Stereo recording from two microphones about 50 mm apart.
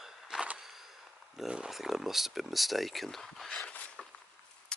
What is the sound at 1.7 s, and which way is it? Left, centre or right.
Speech, centre.